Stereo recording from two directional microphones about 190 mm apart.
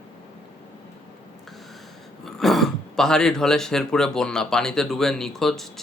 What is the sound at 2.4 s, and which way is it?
Speech, centre (ahead or behind).